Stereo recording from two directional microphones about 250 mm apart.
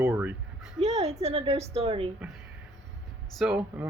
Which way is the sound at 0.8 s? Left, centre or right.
Right.